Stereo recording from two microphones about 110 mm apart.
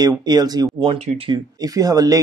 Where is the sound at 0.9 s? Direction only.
60° right (ahead or behind).